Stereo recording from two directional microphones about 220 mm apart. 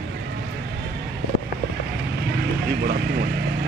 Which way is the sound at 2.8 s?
45° right (ahead or behind).